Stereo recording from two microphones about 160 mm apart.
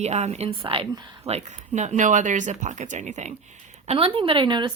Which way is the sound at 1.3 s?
45° right (ahead or behind).